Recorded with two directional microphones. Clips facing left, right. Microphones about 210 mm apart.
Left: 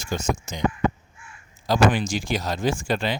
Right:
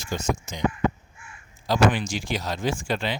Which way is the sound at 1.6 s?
45° left (ahead or behind).